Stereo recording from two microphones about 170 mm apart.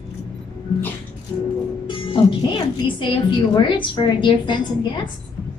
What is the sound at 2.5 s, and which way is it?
A woman's voice, 25° left (ahead or behind).